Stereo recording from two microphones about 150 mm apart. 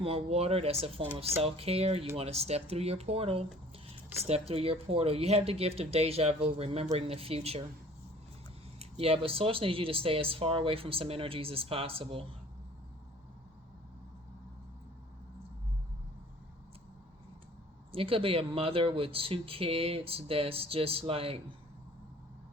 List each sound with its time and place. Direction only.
0.0 s speech: 40° right (ahead or behind)
8.8 s speech: 40° right (ahead or behind)
17.9 s speech: 40° right (ahead or behind)